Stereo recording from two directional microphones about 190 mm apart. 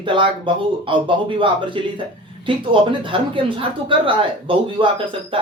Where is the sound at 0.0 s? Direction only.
25° right (ahead or behind).